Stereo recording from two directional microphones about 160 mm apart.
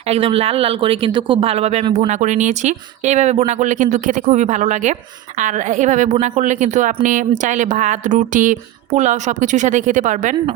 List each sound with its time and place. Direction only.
0.1 s a woman's voice: 35° right (ahead or behind); by 10.3 s 50° right (ahead or behind)